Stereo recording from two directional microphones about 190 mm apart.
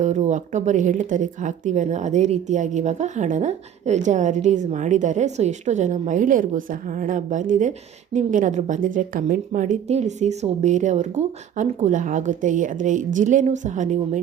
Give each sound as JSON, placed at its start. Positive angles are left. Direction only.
{"t": 0.0, "sound": "a woman's voice", "side_deg": -40}